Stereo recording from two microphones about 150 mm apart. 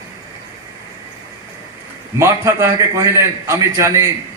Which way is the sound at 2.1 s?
20° right (ahead or behind).